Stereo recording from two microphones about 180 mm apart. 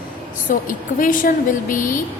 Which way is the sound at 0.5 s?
50° left (ahead or behind).